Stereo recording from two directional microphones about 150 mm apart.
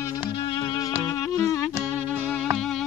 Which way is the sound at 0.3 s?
35° left (ahead or behind).